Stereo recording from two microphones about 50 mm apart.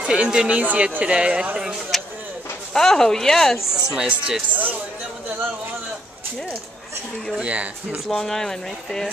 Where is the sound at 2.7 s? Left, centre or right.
Centre.